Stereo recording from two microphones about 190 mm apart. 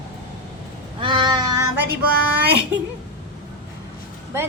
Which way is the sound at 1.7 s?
55° right (ahead or behind).